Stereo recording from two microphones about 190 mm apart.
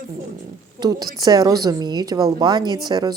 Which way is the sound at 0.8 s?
20° right (ahead or behind).